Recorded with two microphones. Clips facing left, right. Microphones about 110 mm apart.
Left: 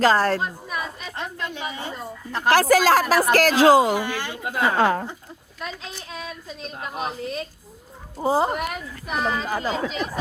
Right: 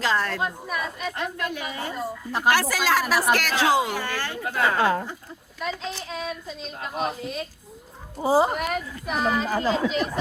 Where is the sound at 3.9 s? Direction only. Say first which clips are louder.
Left 3 dB; 15° left (ahead or behind).